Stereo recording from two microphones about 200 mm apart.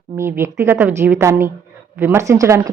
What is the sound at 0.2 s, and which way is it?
A woman's voice, 10° right (ahead or behind).